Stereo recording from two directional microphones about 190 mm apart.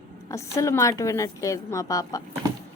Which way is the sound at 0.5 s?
15° left (ahead or behind).